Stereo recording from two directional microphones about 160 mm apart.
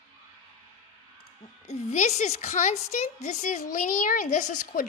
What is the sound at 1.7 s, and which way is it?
A woman's voice, 45° left (ahead or behind).